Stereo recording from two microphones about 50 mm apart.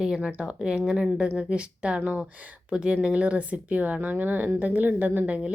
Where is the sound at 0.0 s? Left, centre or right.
Centre.